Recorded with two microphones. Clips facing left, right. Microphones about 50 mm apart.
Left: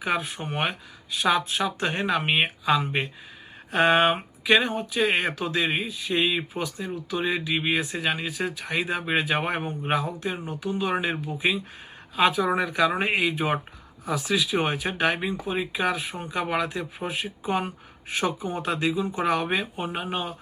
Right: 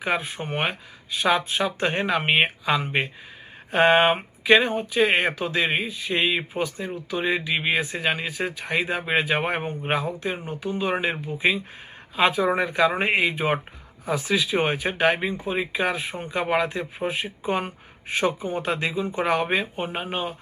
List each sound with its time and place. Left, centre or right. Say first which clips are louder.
0.0 s speech: right 1 dB; right